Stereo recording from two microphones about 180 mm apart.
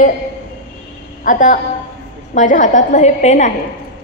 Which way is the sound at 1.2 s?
45° left (ahead or behind).